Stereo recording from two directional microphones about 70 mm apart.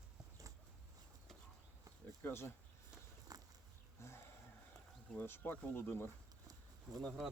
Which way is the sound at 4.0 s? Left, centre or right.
Left.